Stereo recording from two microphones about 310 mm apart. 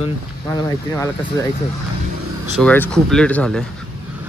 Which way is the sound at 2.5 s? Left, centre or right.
Centre.